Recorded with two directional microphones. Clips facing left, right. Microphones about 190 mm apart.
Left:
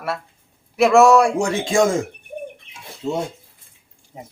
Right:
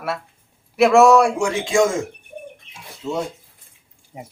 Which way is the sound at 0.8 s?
Centre (ahead or behind).